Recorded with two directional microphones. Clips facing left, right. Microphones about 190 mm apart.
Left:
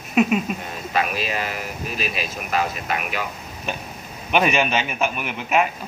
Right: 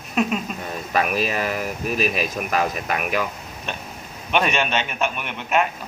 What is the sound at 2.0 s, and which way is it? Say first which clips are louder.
Speech: right 5 dB; 45° right (ahead or behind).